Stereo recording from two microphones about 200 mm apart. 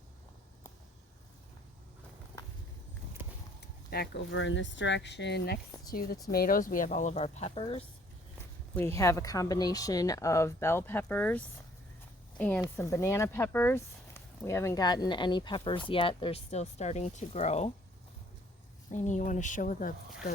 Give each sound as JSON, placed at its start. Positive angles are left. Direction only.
{"t": 3.8, "sound": "speech", "side_deg": 55}
{"t": 8.7, "sound": "speech", "side_deg": 15}
{"t": 18.9, "sound": "speech", "side_deg": 35}